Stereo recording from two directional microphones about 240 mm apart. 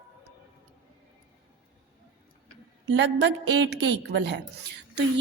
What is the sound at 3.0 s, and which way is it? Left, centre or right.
A woman's voice, right.